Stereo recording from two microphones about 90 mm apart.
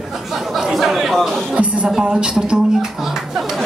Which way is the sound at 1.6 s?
10° right (ahead or behind).